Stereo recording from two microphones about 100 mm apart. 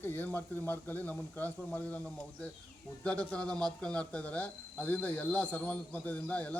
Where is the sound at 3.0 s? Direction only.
10° left (ahead or behind).